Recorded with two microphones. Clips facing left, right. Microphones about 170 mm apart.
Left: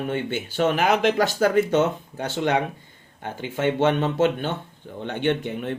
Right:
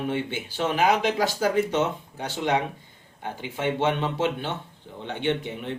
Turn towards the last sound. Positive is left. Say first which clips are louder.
# left 3 dB
turn(degrees=50)  # may be behind; listen again after turning